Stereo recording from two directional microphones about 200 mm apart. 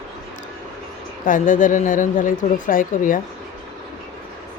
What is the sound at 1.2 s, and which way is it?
A woman's voice, 40° left (ahead or behind).